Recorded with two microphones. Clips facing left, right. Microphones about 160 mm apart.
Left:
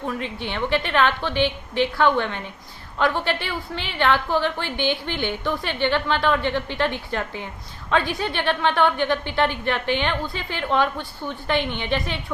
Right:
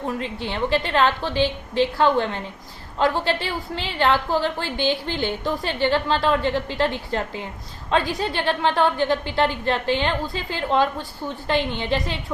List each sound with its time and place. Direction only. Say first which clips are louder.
0.4 s a woman's voice: right 1 dB; 35° right (ahead or behind)